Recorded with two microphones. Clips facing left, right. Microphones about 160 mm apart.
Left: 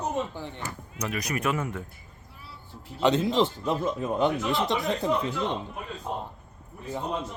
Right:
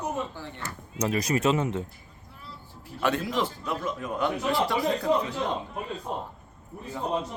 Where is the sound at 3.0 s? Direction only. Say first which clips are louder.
Left 4 dB; 20° left (ahead or behind).